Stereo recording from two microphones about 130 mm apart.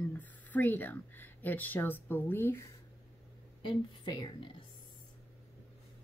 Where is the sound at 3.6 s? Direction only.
35° left (ahead or behind).